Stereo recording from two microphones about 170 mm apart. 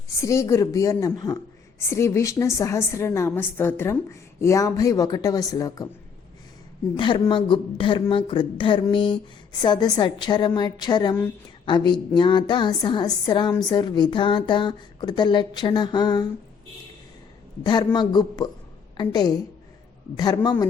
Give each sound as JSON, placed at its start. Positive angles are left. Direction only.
{"t": 0.2, "sound": "a woman's voice", "side_deg": 20}
{"t": 6.9, "sound": "speech", "side_deg": 30}
{"t": 17.6, "sound": "speech", "side_deg": 25}